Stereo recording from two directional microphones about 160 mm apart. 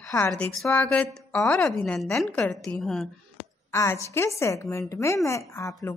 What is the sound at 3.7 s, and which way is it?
A woman's voice, 15° left (ahead or behind).